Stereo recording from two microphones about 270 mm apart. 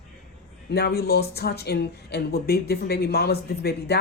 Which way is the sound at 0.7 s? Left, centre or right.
Left.